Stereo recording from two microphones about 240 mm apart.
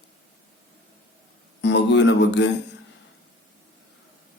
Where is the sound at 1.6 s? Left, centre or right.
Left.